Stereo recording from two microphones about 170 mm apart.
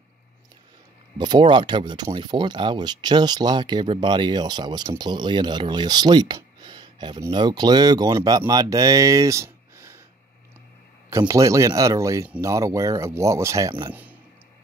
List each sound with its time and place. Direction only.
1.1 s speech: 25° right (ahead or behind)
11.1 s speech: 20° right (ahead or behind)